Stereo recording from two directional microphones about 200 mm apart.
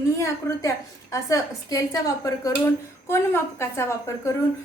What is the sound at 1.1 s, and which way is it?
A woman's voice, 15° left (ahead or behind).